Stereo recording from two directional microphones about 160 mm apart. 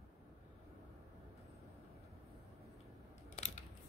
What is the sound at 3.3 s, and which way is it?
Scissors, 45° left (ahead or behind).